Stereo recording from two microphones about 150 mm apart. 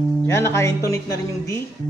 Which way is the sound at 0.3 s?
20° left (ahead or behind).